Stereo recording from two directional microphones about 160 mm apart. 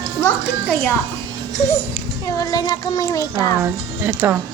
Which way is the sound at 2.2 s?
20° left (ahead or behind).